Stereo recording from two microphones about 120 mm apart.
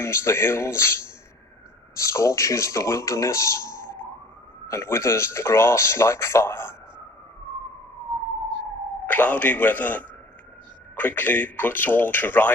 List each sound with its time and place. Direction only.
0.0 s speech: 20° left (ahead or behind)
9.0 s a man's voice: 15° left (ahead or behind)